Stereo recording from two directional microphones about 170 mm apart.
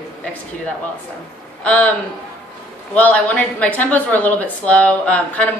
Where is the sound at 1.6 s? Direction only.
10° left (ahead or behind).